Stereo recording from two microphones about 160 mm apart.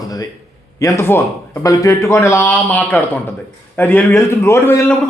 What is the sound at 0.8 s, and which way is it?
A man's voice, 20° left (ahead or behind).